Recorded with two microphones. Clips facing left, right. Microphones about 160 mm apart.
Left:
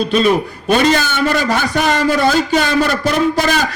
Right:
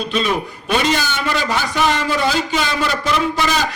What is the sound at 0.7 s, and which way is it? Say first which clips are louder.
A man's voice: left 5 dB; 45° left (ahead or behind).